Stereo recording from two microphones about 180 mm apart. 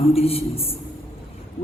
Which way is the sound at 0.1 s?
35° left (ahead or behind).